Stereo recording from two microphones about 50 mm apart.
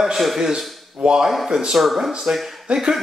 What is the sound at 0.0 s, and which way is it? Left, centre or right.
Speech, centre.